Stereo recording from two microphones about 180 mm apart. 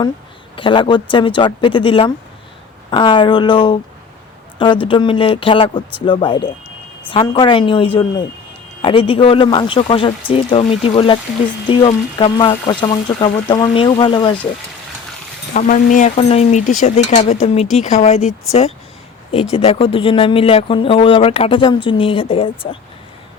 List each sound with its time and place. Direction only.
0.5 s speech: 25° left (ahead or behind)
15.5 s speech: 45° left (ahead or behind)
16.1 s speech: 35° left (ahead or behind)